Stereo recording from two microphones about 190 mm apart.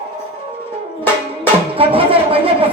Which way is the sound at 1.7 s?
30° right (ahead or behind).